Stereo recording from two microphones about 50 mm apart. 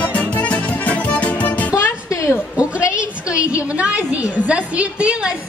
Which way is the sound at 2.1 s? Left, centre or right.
Left.